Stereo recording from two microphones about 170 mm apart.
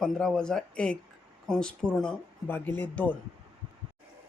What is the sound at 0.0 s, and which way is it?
Speech, 5° left (ahead or behind).